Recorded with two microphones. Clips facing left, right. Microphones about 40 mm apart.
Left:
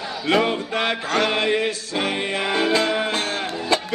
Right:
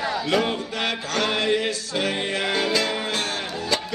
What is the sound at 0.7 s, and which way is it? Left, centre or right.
Music, left.